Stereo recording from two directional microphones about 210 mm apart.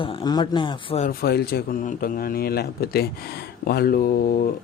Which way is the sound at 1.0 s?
50° left (ahead or behind).